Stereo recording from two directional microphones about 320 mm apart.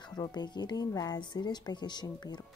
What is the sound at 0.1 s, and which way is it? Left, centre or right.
Speech, centre.